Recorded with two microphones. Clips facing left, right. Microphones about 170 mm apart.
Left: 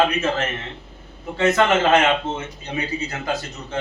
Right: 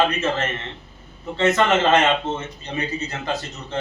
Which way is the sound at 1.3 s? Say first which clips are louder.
Left 1 dB; 10° left (ahead or behind).